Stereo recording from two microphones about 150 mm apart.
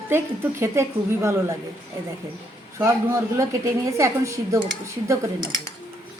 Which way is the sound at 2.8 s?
20° right (ahead or behind).